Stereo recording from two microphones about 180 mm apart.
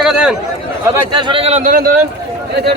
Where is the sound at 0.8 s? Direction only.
25° right (ahead or behind).